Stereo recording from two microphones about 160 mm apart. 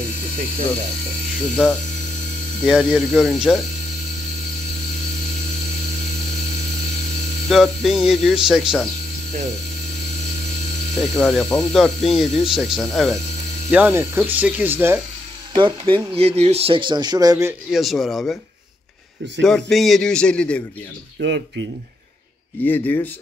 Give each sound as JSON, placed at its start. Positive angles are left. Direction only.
{"t": 2.6, "sound": "speech", "side_deg": -5}
{"t": 7.4, "sound": "a sound", "side_deg": 0}
{"t": 8.0, "sound": "speech", "side_deg": -5}
{"t": 11.0, "sound": "speech", "side_deg": 0}
{"t": 13.7, "sound": "speech", "side_deg": -10}
{"t": 15.5, "sound": "speech", "side_deg": -30}
{"t": 17.6, "sound": "speech", "side_deg": 0}
{"t": 19.4, "sound": "speech", "side_deg": 0}
{"t": 21.2, "sound": "speech", "side_deg": -90}
{"t": 22.7, "sound": "speech", "side_deg": 10}